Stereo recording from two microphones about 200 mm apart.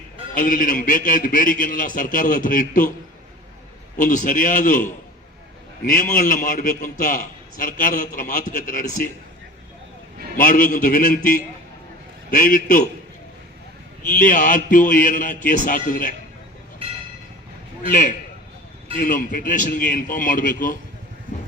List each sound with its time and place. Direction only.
0.3 s a man's voice: 40° left (ahead or behind)
3.9 s a man's voice: 40° left (ahead or behind)
10.3 s a man's voice: 40° left (ahead or behind)
14.1 s a man's voice: 40° left (ahead or behind)
17.8 s a man's voice: 40° left (ahead or behind)